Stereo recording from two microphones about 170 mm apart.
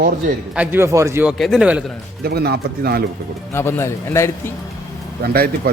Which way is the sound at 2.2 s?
70° right (ahead or behind).